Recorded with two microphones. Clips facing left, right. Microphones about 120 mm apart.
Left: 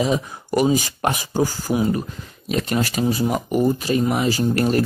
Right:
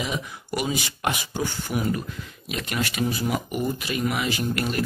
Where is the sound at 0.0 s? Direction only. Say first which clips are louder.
Left 9 dB; 35° left (ahead or behind).